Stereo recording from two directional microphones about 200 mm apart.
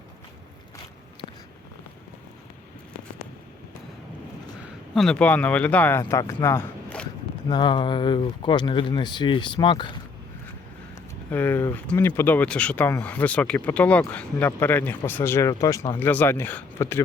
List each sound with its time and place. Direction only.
4.9 s speech: 5° left (ahead or behind)
7.4 s speech: 20° left (ahead or behind)
10.9 s speech: 10° left (ahead or behind)